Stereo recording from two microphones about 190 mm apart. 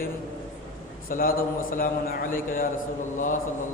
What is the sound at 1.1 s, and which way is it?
A man's voice, 50° left (ahead or behind).